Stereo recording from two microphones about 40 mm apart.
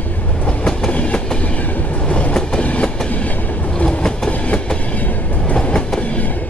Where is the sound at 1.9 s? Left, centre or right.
Left.